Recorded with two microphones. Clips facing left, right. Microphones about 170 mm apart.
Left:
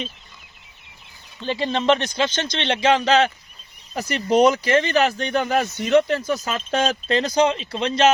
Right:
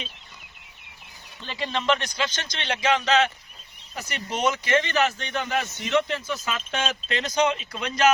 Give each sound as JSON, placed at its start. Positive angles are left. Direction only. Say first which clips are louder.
{"t": 1.5, "sound": "speech", "louder": "left 6 dB", "side_deg": 35}